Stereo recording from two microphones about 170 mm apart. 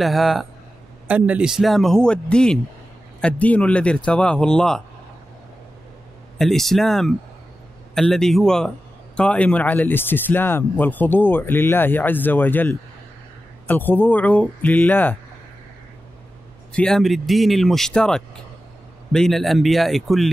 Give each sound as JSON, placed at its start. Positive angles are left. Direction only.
{"t": 0.0, "sound": "a man's voice", "side_deg": 0}
{"t": 6.3, "sound": "a man's voice", "side_deg": 0}
{"t": 16.7, "sound": "speech", "side_deg": 5}